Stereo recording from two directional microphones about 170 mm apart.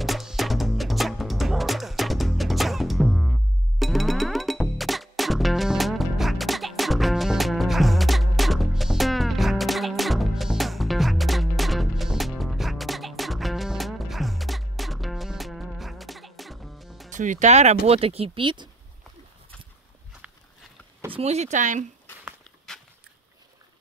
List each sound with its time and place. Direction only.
0.0 s music: centre (ahead or behind)
17.1 s music: 45° right (ahead or behind)
17.8 s speech: 35° right (ahead or behind)
20.2 s a sound: 10° right (ahead or behind)
21.1 s speech: 40° right (ahead or behind)